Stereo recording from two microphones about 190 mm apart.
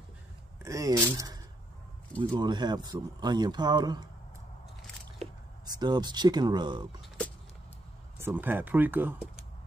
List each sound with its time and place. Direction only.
0.6 s speech: 15° right (ahead or behind)
5.7 s speech: 20° right (ahead or behind)
8.2 s speech: 10° right (ahead or behind)